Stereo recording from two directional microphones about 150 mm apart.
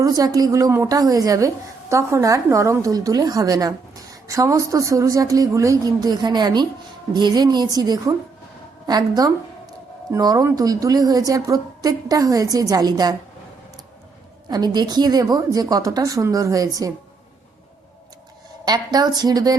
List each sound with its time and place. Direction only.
0.0 s a woman's voice: 25° right (ahead or behind)
14.5 s a woman's voice: 30° right (ahead or behind)
18.6 s a woman's voice: 25° right (ahead or behind)